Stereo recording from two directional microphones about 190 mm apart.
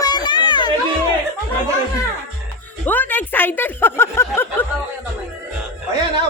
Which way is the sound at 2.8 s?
10° left (ahead or behind).